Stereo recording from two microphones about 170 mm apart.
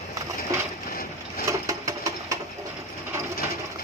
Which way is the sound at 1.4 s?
20° right (ahead or behind).